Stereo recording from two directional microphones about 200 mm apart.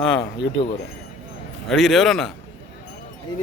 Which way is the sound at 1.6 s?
Centre (ahead or behind).